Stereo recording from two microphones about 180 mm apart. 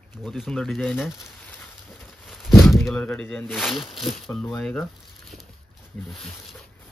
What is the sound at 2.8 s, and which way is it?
Speech, 5° left (ahead or behind).